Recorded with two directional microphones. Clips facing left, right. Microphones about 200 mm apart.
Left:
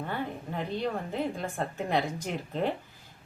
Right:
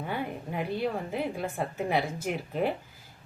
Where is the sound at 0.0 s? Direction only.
10° right (ahead or behind).